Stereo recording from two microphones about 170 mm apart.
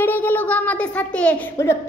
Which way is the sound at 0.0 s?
10° left (ahead or behind).